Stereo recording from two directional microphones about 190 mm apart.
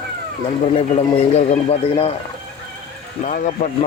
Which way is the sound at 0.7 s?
30° left (ahead or behind).